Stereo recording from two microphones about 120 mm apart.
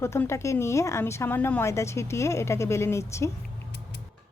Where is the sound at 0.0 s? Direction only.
20° left (ahead or behind).